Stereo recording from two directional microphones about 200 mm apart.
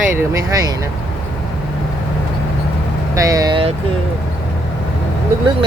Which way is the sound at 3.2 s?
15° right (ahead or behind).